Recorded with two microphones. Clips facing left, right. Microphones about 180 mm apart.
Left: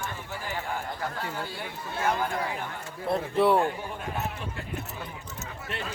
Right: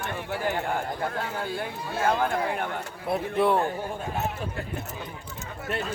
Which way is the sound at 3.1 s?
Centre (ahead or behind).